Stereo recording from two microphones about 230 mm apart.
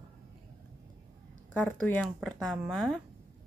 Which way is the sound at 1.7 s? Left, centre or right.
Centre.